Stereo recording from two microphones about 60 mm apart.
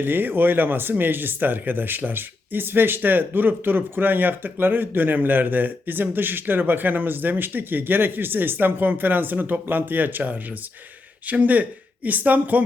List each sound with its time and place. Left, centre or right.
0.0 s speech: right